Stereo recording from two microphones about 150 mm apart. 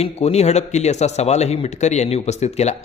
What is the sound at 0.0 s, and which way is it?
A man's voice, 45° left (ahead or behind).